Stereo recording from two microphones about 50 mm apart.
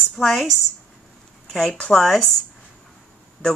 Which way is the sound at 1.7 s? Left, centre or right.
Centre.